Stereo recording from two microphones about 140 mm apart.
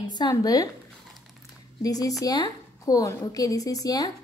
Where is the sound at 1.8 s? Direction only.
25° left (ahead or behind).